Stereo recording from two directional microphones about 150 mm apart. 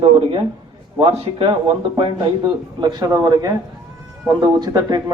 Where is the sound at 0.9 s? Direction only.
35° right (ahead or behind).